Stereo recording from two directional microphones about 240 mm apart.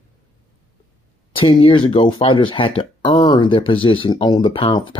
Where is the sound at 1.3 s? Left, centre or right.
Left.